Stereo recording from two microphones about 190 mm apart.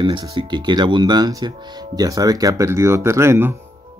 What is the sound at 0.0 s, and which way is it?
Speech, 25° right (ahead or behind).